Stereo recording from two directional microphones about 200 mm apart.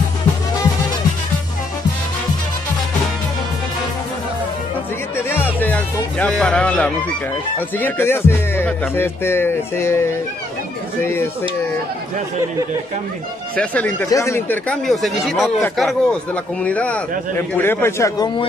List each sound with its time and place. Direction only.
5.3 s music: 10° left (ahead or behind)
13.6 s speech: 5° left (ahead or behind)
16.6 s music: 5° left (ahead or behind)